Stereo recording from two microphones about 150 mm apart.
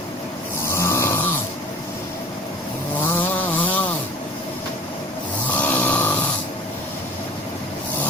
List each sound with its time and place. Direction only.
0.7 s snoring: 15° left (ahead or behind)
3.0 s chainsaw: 15° left (ahead or behind)
5.5 s snoring: 10° left (ahead or behind)